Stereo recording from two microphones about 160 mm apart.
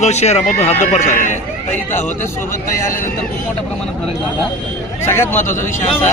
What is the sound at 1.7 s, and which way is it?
A man's voice, 15° left (ahead or behind).